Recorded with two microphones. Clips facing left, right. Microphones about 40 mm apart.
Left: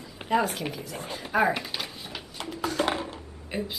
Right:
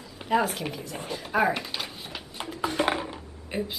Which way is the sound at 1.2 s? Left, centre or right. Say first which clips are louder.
Even; centre.